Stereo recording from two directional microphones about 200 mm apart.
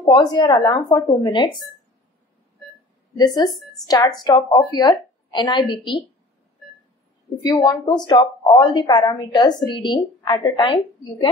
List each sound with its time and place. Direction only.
0.0 s a woman's voice: 20° left (ahead or behind)
3.4 s a woman's voice: 20° left (ahead or behind)
7.4 s a woman's voice: 20° left (ahead or behind)